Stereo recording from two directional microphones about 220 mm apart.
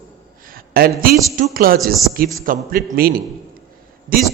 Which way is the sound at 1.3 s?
40° right (ahead or behind).